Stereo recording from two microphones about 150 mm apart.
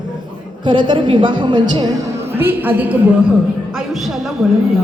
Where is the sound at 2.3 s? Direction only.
15° right (ahead or behind).